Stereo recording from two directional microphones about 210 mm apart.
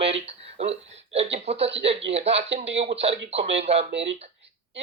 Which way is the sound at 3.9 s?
60° right (ahead or behind).